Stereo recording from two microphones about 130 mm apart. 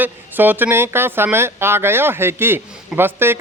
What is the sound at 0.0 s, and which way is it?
Speech, 15° right (ahead or behind).